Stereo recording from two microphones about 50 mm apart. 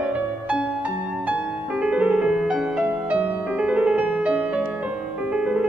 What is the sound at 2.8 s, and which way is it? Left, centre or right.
Music, right.